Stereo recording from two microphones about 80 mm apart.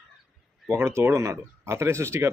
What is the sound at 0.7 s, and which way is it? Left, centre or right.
Speech, right.